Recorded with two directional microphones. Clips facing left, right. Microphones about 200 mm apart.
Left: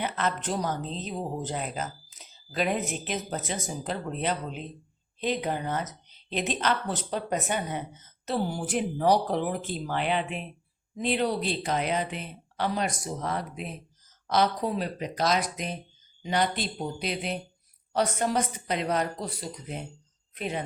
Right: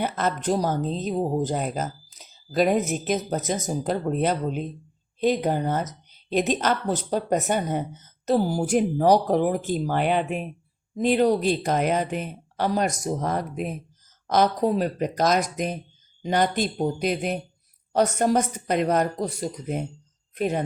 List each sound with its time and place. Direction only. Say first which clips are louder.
0.0 s speech: right 4 dB; 40° right (ahead or behind)